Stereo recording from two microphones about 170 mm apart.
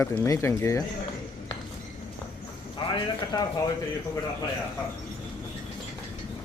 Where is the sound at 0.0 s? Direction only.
15° left (ahead or behind).